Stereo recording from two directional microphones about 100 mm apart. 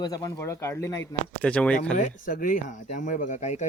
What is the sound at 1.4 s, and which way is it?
Speech, 15° left (ahead or behind).